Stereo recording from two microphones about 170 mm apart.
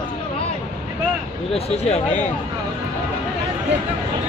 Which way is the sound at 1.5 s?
40° left (ahead or behind).